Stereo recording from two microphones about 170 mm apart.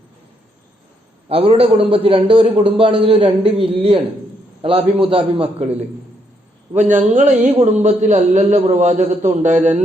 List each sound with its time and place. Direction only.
1.3 s a man's voice: 35° right (ahead or behind)
6.7 s a man's voice: 45° right (ahead or behind)